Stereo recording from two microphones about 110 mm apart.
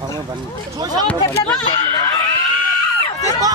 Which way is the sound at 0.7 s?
35° right (ahead or behind).